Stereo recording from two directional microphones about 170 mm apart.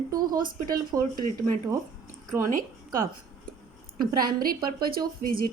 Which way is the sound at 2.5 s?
55° right (ahead or behind).